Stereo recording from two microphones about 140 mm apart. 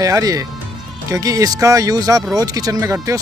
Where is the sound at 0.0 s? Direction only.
25° right (ahead or behind).